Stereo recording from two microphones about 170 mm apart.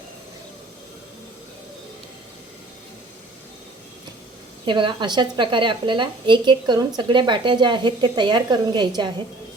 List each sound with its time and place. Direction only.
4.6 s a woman's voice: 30° right (ahead or behind)